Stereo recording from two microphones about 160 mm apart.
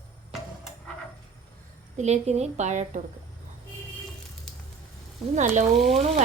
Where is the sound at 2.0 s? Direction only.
45° right (ahead or behind).